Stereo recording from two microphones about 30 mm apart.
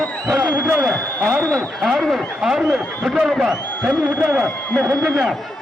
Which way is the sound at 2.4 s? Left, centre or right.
Centre.